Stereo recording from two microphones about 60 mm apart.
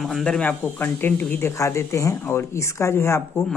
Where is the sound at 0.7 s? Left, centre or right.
Left.